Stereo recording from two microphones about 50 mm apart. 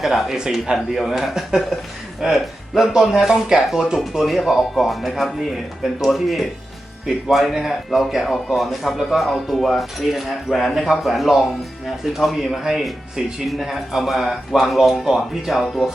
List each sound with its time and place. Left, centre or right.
0.0 s a man's voice: centre
15.6 s speech: centre